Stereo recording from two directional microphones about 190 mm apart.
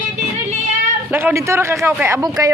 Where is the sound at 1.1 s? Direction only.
15° right (ahead or behind).